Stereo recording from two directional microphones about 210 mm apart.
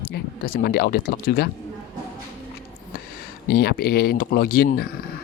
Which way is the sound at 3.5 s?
50° left (ahead or behind).